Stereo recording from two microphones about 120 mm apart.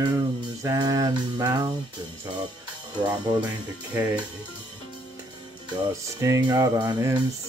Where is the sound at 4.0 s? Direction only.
15° right (ahead or behind).